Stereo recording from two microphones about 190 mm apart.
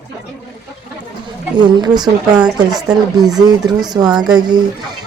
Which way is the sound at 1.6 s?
25° right (ahead or behind).